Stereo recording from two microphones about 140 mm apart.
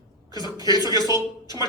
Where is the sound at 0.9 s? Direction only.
30° left (ahead or behind).